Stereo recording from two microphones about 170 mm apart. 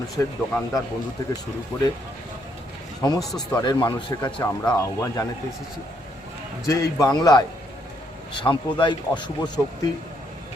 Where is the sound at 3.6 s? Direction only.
25° left (ahead or behind).